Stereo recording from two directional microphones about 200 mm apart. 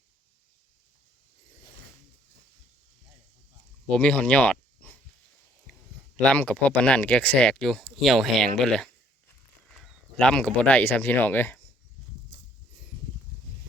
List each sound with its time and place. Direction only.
3.8 s speech: 5° left (ahead or behind)
5.7 s a sound: centre (ahead or behind)
6.1 s speech: 5° left (ahead or behind)